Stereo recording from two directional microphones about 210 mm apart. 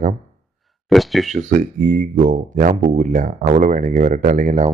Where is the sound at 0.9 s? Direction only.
Centre (ahead or behind).